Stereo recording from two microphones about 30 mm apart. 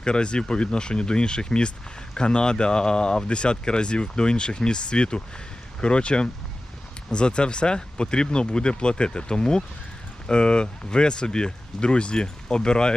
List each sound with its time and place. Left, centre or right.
0.0 s speech: left